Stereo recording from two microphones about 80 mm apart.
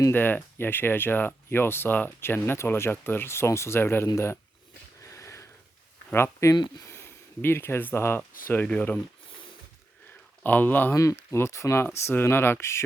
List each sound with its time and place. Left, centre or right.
0.1 s speech: left
5.0 s a sound: left
6.1 s speech: left
8.6 s speech: centre
10.4 s speech: left
10.9 s speech: left